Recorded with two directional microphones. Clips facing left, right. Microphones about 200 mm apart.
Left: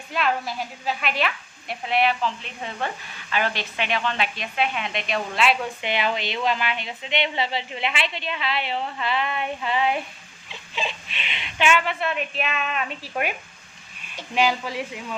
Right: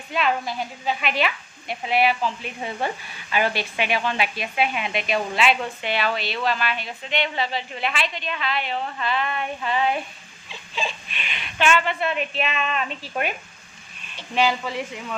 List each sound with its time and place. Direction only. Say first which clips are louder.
0.1 s speech: right 1 dB; centre (ahead or behind)
5.8 s speech: even; 15° left (ahead or behind)
11.9 s a woman's voice: right 2 dB; centre (ahead or behind)
14.3 s speech: right 1 dB; 10° left (ahead or behind)